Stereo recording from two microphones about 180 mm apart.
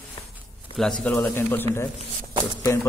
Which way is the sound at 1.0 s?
10° left (ahead or behind).